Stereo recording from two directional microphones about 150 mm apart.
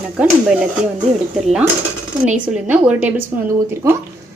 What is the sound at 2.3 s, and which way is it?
A woman's voice, 10° right (ahead or behind).